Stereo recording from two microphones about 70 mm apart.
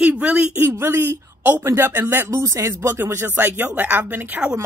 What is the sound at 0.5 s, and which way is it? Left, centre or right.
Speech, right.